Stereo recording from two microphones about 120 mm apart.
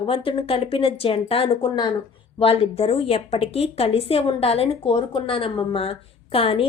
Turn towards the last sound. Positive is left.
turn(degrees=50)  # may be behind; listen again after turning